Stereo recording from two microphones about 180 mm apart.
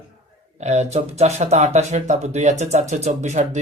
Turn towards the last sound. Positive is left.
turn(degrees=-40)  # may be behind; listen again after turning